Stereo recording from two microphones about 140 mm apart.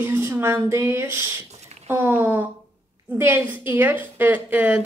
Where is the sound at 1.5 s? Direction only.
50° right (ahead or behind).